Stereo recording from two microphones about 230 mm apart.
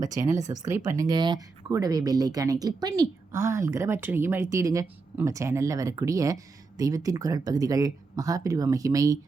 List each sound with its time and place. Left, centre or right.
0.1 s speech: centre